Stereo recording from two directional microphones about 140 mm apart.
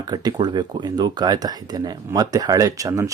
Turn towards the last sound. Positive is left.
turn(degrees=-25)  # may be behind; listen again after turning